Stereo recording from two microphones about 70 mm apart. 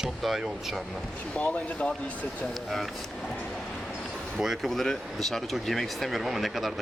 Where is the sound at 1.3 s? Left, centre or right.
Centre.